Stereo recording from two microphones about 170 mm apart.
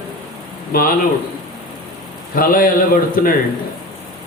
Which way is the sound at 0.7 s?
60° left (ahead or behind).